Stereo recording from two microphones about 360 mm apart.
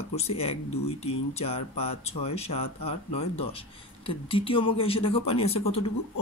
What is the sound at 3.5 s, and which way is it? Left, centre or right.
Speech, centre.